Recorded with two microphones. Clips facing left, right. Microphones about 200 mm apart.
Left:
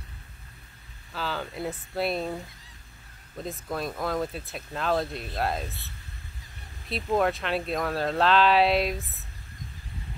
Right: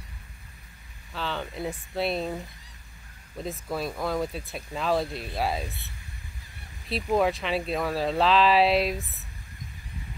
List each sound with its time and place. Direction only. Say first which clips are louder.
1.1 s speech: even; centre (ahead or behind)
3.4 s speech: right 1 dB; centre (ahead or behind)
5.7 s speech: right 1 dB; 15° right (ahead or behind)
7.2 s speech: right 1 dB; centre (ahead or behind)